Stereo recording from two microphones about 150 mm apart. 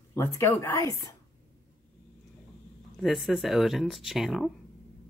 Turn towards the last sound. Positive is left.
turn(degrees=0)  # may be behind; listen again after turning